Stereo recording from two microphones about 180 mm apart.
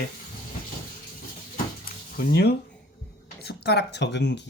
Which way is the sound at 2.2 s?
60° left (ahead or behind).